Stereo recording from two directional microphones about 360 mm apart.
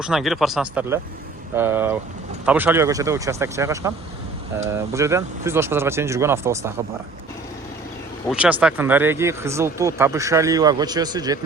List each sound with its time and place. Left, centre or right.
0.0 s speech: centre
8.3 s speech: centre